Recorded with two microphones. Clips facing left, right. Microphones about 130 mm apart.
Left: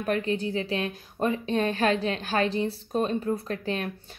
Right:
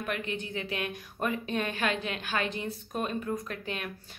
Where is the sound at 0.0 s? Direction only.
35° left (ahead or behind).